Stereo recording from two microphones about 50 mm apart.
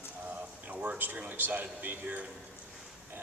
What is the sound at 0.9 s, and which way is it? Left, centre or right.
A man's voice, right.